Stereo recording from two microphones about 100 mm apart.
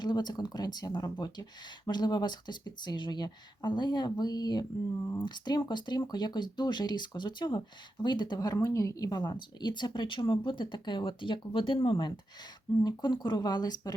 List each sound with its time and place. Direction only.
0.0 s speech: 45° left (ahead or behind)
12.8 s speech: 45° left (ahead or behind)